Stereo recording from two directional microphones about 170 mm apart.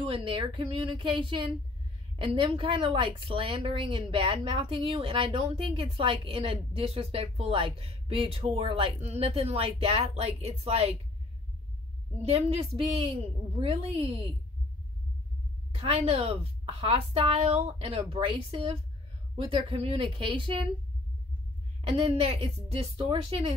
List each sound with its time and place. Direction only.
0.0 s a woman's voice: 30° right (ahead or behind)
12.2 s a woman's voice: 40° right (ahead or behind)
15.8 s a woman's voice: 35° right (ahead or behind)
21.9 s a woman's voice: 35° right (ahead or behind)